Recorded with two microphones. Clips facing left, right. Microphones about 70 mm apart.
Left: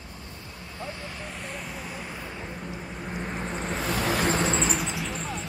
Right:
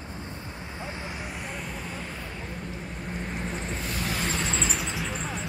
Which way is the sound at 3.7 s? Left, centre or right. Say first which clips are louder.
Left 5 dB; left.